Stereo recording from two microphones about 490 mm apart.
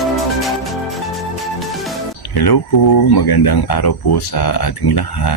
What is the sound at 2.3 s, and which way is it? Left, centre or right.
Speech, left.